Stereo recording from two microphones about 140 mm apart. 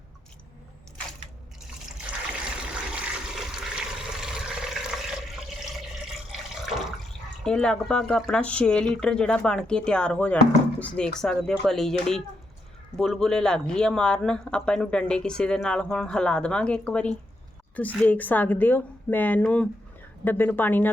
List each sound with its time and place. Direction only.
2.6 s water: 5° right (ahead or behind)
7.4 s speech: 5° left (ahead or behind)